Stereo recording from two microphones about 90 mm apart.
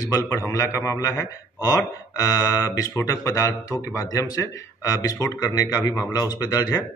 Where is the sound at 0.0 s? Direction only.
40° left (ahead or behind).